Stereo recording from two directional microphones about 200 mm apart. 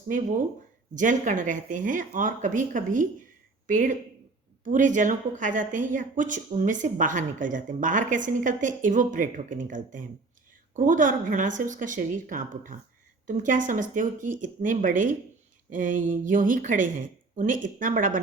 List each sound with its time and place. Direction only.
0.1 s a woman's voice: 40° right (ahead or behind)